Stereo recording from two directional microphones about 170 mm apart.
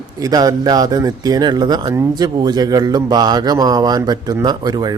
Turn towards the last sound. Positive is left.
turn(degrees=-25)  # may be behind; listen again after turning